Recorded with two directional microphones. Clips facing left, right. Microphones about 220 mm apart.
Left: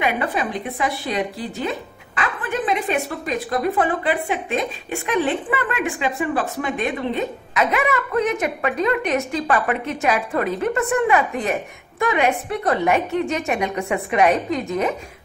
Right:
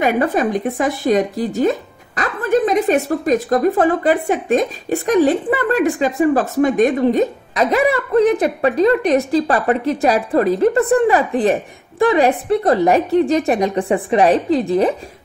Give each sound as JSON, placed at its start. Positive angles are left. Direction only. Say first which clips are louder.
{"t": 0.0, "sound": "speech", "louder": "right 7 dB", "side_deg": -40}